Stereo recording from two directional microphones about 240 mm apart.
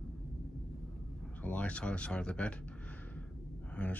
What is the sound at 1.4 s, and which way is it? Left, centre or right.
Speech, centre.